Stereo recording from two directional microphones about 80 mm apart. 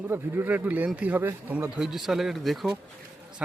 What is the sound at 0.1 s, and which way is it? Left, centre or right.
Speech, right.